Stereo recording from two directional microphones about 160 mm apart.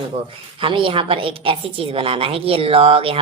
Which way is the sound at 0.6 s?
35° right (ahead or behind).